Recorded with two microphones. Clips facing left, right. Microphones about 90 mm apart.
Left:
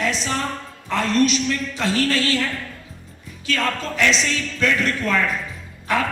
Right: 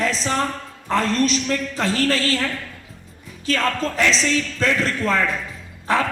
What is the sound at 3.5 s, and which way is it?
A man's voice, 40° right (ahead or behind).